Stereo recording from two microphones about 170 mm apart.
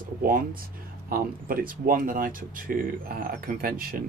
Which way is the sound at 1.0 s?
60° right (ahead or behind).